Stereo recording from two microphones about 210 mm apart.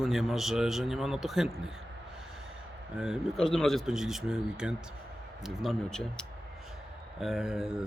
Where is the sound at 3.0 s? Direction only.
Centre (ahead or behind).